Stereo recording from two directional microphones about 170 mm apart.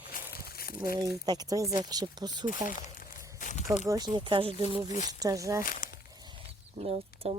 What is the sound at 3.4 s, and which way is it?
Speech, 50° left (ahead or behind).